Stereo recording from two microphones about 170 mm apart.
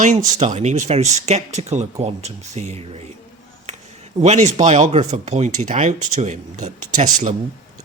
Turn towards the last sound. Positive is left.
turn(degrees=-45)  # may be behind; listen again after turning